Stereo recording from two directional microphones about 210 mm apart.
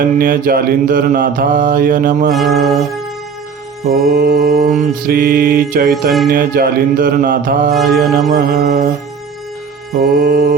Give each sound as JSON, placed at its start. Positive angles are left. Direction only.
{"t": 0.0, "sound": "mantra", "side_deg": -40}
{"t": 2.3, "sound": "music", "side_deg": 0}
{"t": 3.8, "sound": "mantra", "side_deg": -45}
{"t": 7.8, "sound": "music", "side_deg": 0}
{"t": 8.3, "sound": "mantra", "side_deg": -45}
{"t": 9.9, "sound": "mantra", "side_deg": -45}